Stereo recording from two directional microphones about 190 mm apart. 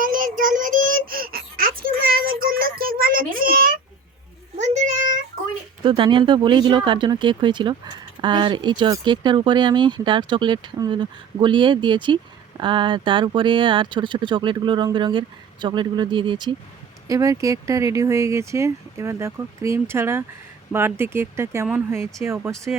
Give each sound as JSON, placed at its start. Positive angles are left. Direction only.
{"t": 0.0, "sound": "child singing", "side_deg": -45}
{"t": 4.5, "sound": "a sound", "side_deg": -35}
{"t": 5.8, "sound": "speech", "side_deg": -25}